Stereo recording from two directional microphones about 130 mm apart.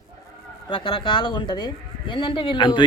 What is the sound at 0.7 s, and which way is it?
A man's voice, 40° left (ahead or behind).